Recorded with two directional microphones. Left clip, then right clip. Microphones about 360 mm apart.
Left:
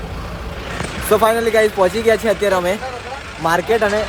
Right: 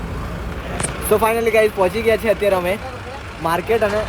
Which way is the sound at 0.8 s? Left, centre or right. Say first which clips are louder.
Left 2 dB; left.